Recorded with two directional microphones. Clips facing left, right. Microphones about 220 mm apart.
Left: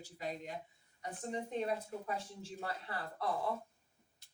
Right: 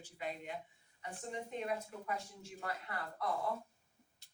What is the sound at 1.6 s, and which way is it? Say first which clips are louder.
Speech: left 3 dB; 30° left (ahead or behind).